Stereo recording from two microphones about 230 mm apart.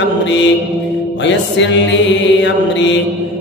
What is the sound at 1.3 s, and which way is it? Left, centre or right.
Mantra, left.